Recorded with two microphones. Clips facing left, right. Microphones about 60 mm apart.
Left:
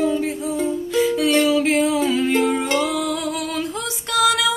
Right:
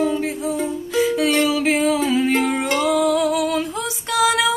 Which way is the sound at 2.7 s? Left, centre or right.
Centre.